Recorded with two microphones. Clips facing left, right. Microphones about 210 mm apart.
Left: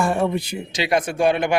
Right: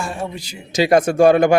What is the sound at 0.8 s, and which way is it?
Speech, 45° right (ahead or behind).